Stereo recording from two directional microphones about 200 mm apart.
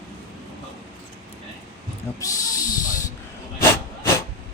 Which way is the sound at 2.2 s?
15° left (ahead or behind).